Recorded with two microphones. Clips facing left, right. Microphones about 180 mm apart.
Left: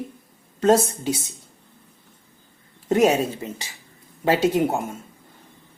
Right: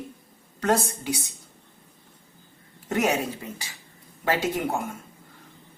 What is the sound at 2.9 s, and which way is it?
Speech, 25° left (ahead or behind).